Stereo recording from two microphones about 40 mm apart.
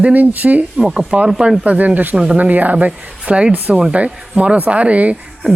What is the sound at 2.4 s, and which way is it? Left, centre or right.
Speech, right.